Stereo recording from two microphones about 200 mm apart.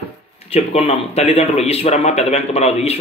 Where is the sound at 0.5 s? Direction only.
30° left (ahead or behind).